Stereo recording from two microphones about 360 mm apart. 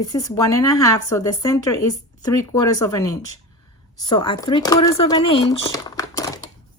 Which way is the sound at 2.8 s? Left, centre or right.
Centre.